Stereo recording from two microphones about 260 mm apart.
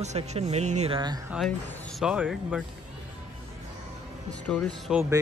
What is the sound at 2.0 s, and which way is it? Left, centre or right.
Speech, centre.